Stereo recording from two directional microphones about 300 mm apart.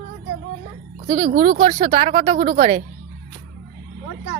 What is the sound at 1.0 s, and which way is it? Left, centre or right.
Speech, right.